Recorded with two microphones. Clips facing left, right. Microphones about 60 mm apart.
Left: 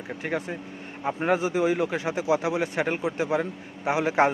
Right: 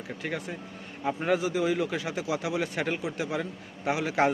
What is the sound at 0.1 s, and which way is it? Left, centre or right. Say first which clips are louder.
A man's voice: left 5 dB; left.